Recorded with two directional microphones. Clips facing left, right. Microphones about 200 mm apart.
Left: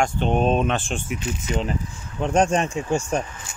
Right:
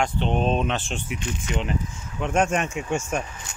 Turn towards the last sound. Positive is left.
turn(degrees=35)  # may be behind; listen again after turning